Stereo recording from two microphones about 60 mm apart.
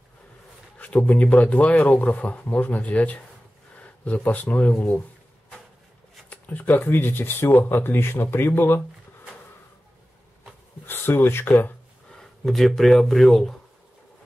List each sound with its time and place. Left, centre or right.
0.7 s speech: left
6.3 s speech: left
10.9 s speech: left
12.2 s speech: centre